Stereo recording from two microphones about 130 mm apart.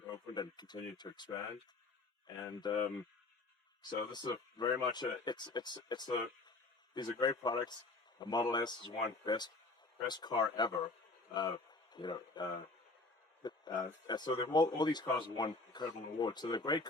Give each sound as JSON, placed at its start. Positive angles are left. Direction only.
{"t": 0.3, "sound": "a man's voice", "side_deg": 35}
{"t": 3.8, "sound": "a man's voice", "side_deg": 35}
{"t": 13.4, "sound": "a sound", "side_deg": 35}
{"t": 14.1, "sound": "a man's voice", "side_deg": 35}